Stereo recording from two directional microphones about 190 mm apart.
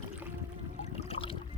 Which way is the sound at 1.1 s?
30° left (ahead or behind).